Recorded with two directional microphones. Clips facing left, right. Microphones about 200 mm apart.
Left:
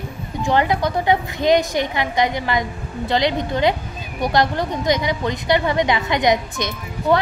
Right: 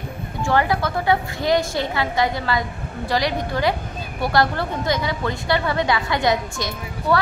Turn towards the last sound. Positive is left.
turn(degrees=20)  # may be behind; listen again after turning